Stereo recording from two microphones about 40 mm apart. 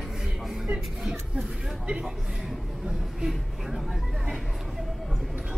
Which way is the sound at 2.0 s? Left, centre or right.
Centre.